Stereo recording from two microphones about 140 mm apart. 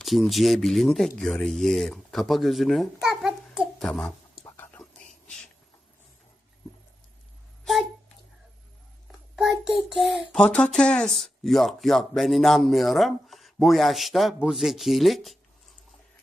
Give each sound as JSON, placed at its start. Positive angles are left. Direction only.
{"t": 0.0, "sound": "speech", "side_deg": 0}
{"t": 4.4, "sound": "whispering", "side_deg": 15}
{"t": 7.6, "sound": "a sound", "side_deg": 0}
{"t": 9.3, "sound": "a child's voice", "side_deg": -5}